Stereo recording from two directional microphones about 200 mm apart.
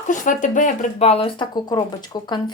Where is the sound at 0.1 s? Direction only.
40° left (ahead or behind).